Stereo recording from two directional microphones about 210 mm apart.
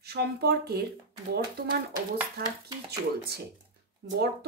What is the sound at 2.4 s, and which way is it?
Speech, 45° right (ahead or behind).